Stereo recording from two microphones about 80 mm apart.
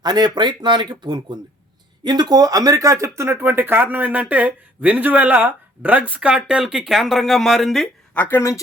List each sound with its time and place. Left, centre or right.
0.0 s speech: right; by 7.9 s centre
8.1 s speech: centre